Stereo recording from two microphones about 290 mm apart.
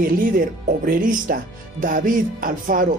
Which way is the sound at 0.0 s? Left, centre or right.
Right.